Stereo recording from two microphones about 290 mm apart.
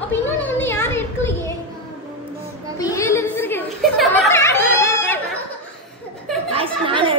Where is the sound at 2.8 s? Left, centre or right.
Centre.